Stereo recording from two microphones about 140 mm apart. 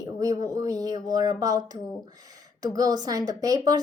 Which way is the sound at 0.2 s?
25° right (ahead or behind).